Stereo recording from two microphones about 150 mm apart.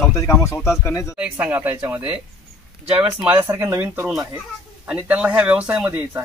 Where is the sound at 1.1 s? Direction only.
10° right (ahead or behind).